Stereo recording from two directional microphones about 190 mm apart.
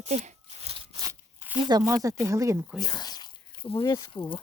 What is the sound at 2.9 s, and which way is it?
Speech, 20° left (ahead or behind).